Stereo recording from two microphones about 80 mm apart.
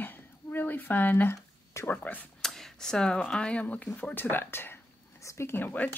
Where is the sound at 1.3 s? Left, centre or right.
Left.